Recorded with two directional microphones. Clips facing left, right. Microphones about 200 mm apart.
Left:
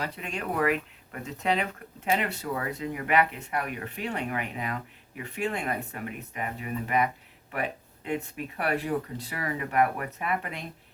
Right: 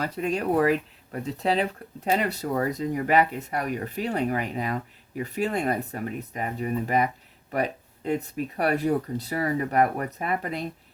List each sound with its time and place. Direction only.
0.0 s speech: 40° right (ahead or behind)